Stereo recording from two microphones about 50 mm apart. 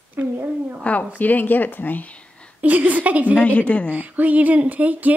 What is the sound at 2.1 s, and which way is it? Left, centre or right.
Whispering, left.